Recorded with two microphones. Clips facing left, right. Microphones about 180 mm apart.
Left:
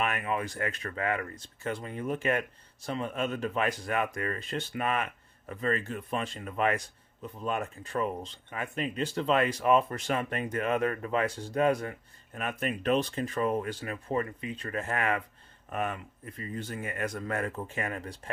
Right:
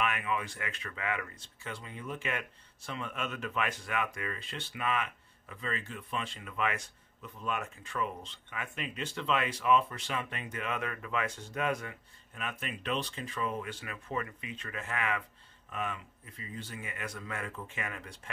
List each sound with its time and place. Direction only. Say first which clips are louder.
0.0 s speech: left 3 dB; 40° left (ahead or behind)